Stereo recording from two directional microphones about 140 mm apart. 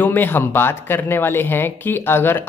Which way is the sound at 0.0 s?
15° left (ahead or behind).